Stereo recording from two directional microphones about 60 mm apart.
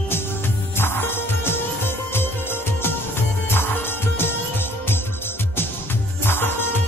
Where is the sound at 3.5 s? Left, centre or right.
Left.